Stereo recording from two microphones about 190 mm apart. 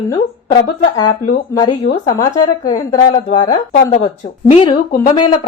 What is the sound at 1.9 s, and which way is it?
Speech, 55° left (ahead or behind).